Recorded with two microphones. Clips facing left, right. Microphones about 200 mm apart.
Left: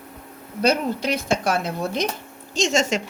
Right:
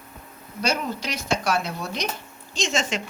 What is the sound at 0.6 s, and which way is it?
Speech, 55° left (ahead or behind).